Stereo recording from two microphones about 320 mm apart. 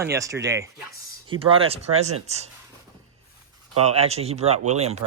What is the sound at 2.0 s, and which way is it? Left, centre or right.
Speech, centre.